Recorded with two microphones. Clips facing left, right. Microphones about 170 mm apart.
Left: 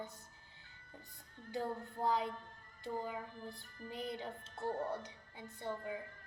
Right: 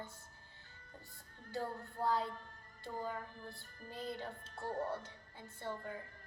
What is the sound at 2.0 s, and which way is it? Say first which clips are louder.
A woman's voice: even; 15° left (ahead or behind).